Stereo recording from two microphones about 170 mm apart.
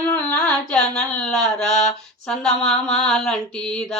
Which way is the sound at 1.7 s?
40° left (ahead or behind).